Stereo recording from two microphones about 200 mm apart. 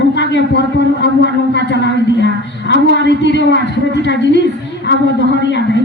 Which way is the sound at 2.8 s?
60° left (ahead or behind).